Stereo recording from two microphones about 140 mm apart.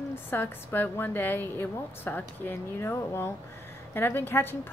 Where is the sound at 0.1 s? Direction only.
15° left (ahead or behind).